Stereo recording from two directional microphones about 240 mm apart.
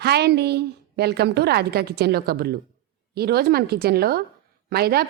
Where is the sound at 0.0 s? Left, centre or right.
Right.